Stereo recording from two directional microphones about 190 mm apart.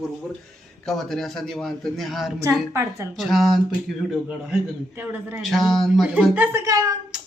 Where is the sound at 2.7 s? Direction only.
15° right (ahead or behind).